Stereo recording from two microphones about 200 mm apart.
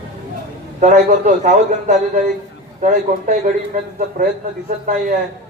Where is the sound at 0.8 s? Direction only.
35° right (ahead or behind).